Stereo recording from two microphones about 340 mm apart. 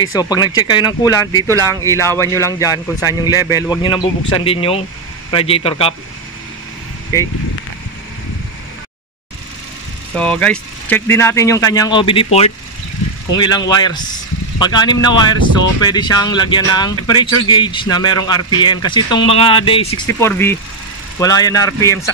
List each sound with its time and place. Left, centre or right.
0.0 s speech: centre
10.1 s speech: centre